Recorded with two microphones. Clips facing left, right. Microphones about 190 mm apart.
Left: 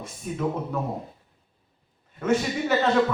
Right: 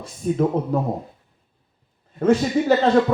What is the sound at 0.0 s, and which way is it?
Speech, 35° right (ahead or behind).